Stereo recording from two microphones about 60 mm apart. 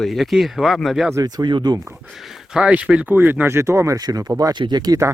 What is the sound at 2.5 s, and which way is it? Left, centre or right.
Speech, centre.